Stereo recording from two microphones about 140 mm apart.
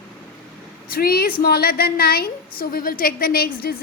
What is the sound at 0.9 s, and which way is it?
A woman's voice, 90° left.